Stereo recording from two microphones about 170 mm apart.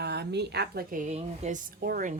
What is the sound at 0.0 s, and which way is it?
A woman's voice, 80° right.